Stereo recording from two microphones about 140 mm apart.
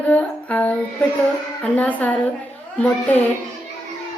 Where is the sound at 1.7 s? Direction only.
10° left (ahead or behind).